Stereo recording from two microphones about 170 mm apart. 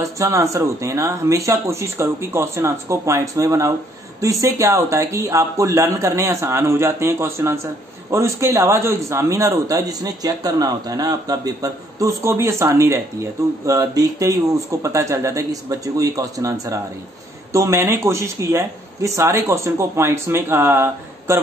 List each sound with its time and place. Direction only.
0.0 s speech: 20° right (ahead or behind)